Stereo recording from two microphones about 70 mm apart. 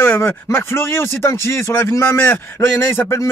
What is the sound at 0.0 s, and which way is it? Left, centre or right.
Speech, left.